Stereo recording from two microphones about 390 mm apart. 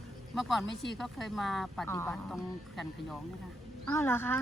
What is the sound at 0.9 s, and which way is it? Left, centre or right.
Speech, centre.